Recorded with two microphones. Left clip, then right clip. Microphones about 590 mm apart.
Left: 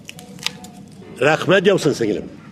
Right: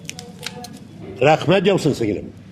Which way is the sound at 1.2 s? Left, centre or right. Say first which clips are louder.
Even; centre.